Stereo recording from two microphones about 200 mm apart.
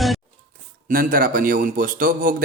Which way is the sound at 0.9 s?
45° right (ahead or behind).